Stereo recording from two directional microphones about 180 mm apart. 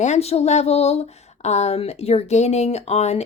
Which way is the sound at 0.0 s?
35° left (ahead or behind).